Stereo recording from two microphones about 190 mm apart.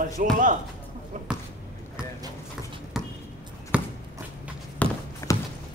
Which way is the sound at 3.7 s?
5° right (ahead or behind).